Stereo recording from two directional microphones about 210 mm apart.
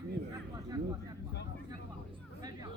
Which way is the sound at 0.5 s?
15° right (ahead or behind).